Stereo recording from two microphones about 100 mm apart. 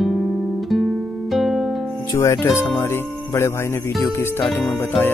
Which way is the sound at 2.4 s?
25° left (ahead or behind).